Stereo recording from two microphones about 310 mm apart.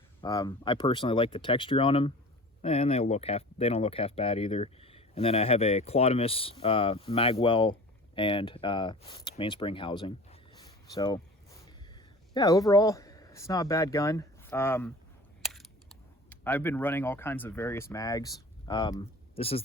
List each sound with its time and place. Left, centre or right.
0.2 s speech: centre
12.3 s speech: centre